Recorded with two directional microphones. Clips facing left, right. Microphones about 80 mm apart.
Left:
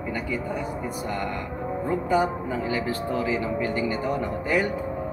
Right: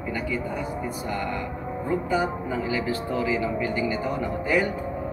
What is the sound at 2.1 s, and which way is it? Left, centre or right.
Speech, left.